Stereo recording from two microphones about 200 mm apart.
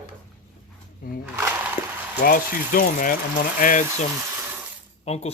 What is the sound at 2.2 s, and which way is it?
Speech, 45° left (ahead or behind).